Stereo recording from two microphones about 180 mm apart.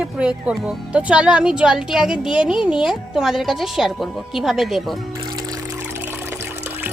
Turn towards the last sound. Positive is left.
turn(degrees=0)  # may be behind; listen again after turning